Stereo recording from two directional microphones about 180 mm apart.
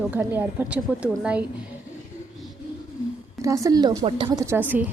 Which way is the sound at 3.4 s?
20° right (ahead or behind).